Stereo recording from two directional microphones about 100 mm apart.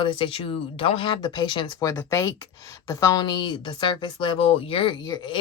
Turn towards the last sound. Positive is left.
turn(degrees=45)  # may be behind; listen again after turning